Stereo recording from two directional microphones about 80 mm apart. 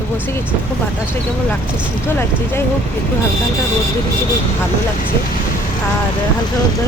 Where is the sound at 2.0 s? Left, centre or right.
Left.